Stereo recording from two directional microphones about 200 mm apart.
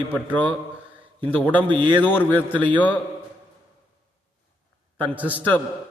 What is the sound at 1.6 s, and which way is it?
Speech, 25° right (ahead or behind).